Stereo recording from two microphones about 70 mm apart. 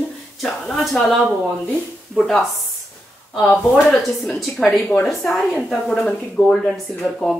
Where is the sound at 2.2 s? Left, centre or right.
Centre.